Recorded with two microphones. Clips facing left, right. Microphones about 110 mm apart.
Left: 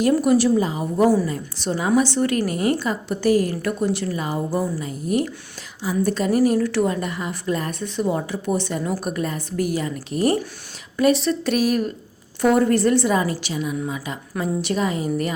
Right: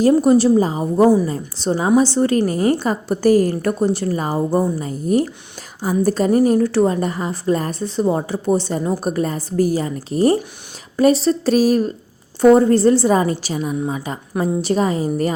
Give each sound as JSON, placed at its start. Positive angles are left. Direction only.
{"t": 0.2, "sound": "a woman's voice", "side_deg": -30}
{"t": 1.0, "sound": "a woman's voice", "side_deg": -15}
{"t": 1.3, "sound": "a woman's voice", "side_deg": -30}